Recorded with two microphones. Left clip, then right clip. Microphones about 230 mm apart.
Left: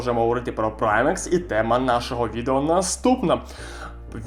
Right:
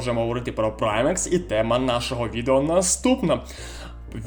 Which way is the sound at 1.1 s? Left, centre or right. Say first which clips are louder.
Left 1 dB; right.